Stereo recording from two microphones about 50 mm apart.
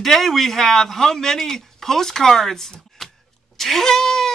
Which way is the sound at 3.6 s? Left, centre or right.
Centre.